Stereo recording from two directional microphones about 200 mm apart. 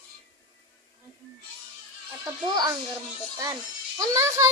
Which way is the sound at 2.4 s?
20° right (ahead or behind).